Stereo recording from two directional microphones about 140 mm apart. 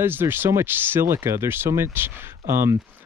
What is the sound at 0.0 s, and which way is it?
Speech, 15° right (ahead or behind).